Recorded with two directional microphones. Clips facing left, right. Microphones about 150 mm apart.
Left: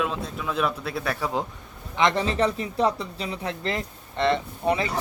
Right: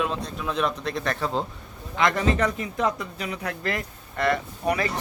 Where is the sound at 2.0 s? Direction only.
25° left (ahead or behind).